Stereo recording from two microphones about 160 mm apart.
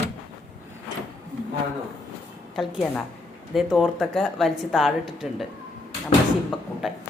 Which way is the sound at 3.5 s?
5° right (ahead or behind).